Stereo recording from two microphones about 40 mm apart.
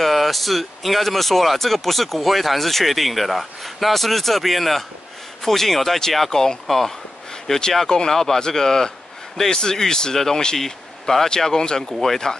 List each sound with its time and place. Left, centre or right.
0.0 s speech: centre